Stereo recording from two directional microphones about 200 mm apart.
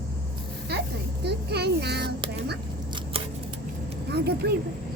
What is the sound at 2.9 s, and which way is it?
Scissors, 25° right (ahead or behind).